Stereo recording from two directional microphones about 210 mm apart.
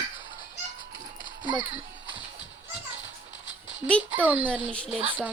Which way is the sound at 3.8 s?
20° right (ahead or behind).